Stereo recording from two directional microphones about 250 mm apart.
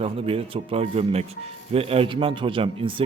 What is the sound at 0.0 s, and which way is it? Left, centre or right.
Speech, right.